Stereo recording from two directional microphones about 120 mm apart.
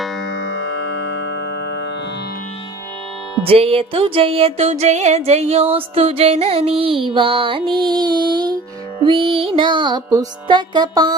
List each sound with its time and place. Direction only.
3.4 s music: 55° right (ahead or behind); by 11.1 s 35° right (ahead or behind)